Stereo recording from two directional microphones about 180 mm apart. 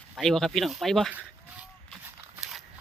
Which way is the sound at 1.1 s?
5° right (ahead or behind).